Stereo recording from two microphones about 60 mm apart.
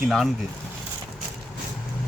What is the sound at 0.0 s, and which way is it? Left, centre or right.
Speech, centre.